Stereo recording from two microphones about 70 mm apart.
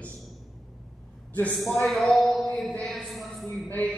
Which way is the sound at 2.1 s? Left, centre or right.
Centre.